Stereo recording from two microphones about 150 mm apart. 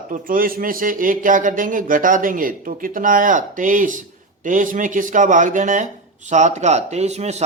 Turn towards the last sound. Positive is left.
turn(degrees=-50)  # may be behind; listen again after turning